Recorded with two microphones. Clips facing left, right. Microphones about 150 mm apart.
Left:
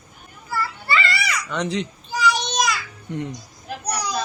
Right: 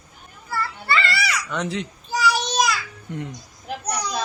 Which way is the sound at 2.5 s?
5° right (ahead or behind).